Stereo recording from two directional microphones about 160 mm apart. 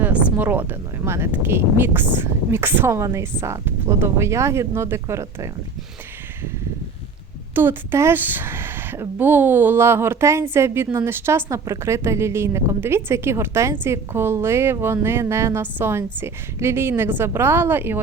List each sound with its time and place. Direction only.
0.0 s speech: 10° right (ahead or behind)
7.5 s speech: 15° right (ahead or behind)